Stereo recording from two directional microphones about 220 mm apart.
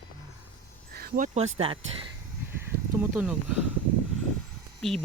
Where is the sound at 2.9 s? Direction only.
5° right (ahead or behind).